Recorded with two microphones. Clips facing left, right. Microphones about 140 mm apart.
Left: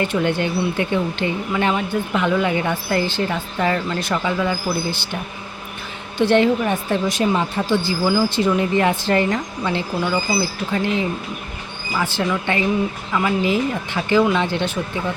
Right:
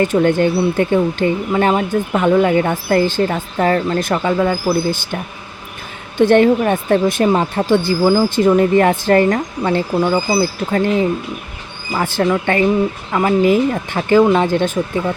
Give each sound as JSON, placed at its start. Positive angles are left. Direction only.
{"t": 0.0, "sound": "speech", "side_deg": -45}
{"t": 6.1, "sound": "speech", "side_deg": -50}